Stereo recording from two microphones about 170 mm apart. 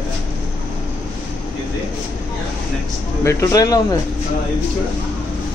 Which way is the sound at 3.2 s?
15° left (ahead or behind).